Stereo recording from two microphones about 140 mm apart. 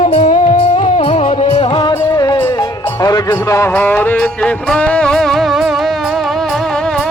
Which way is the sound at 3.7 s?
15° left (ahead or behind).